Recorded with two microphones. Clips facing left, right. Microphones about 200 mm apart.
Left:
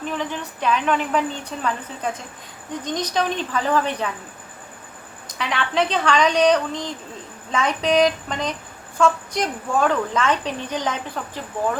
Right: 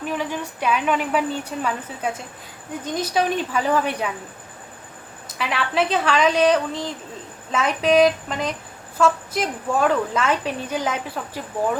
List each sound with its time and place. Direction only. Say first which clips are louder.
0.1 s a woman's voice: right 1 dB; 10° right (ahead or behind)
5.3 s a woman's voice: even; 5° right (ahead or behind)